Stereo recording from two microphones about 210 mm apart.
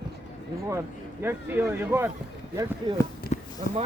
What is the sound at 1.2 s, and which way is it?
Speech, 10° right (ahead or behind).